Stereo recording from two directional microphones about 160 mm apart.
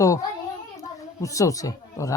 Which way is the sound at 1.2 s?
20° left (ahead or behind).